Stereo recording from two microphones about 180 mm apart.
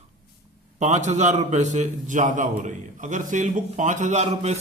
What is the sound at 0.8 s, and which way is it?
A man's voice, 40° right (ahead or behind).